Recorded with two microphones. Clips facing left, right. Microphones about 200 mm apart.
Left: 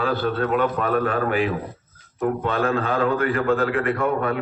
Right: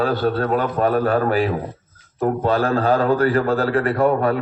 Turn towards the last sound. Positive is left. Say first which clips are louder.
# right 5 dB
turn(degrees=-35)  # may be behind; listen again after turning